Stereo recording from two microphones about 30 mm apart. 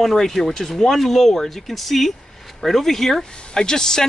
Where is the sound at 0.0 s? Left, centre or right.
Centre.